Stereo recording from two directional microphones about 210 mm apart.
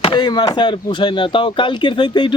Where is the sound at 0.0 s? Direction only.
20° left (ahead or behind).